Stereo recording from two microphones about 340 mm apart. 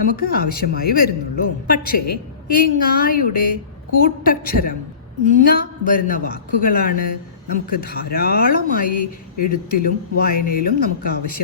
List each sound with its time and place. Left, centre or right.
0.2 s a woman's voice: left